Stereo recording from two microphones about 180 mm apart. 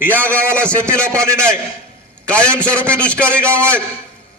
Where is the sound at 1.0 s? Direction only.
15° right (ahead or behind).